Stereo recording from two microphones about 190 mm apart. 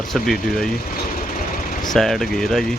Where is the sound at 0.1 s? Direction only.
Centre (ahead or behind).